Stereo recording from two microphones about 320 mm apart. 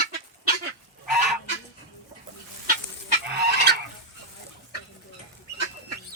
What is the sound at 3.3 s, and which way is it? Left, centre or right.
Fowl, right.